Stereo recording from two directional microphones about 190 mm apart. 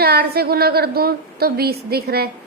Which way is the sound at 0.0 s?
55° right (ahead or behind).